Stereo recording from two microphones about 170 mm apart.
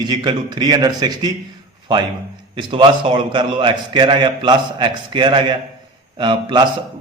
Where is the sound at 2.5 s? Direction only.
30° right (ahead or behind).